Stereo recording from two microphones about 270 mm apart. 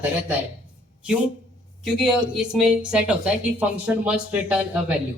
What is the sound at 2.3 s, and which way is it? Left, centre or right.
A man's voice, centre.